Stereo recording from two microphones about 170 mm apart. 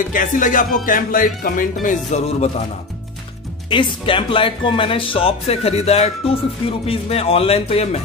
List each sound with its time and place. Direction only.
0.1 s music: 50° left (ahead or behind)
3.7 s speech: 30° left (ahead or behind)